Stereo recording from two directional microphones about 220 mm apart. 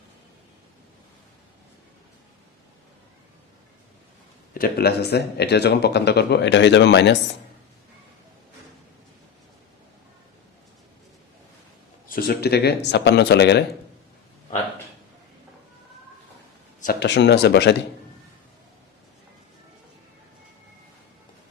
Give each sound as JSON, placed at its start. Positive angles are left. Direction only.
{"t": 4.5, "sound": "speech", "side_deg": 45}
{"t": 12.0, "sound": "speech", "side_deg": 45}
{"t": 16.8, "sound": "speech", "side_deg": 50}